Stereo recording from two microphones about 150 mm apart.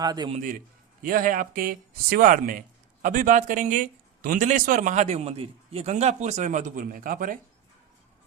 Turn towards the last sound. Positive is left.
turn(degrees=-65)  # may be behind; listen again after turning